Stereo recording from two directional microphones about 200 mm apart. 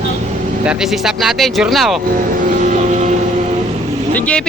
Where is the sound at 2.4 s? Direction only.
40° right (ahead or behind).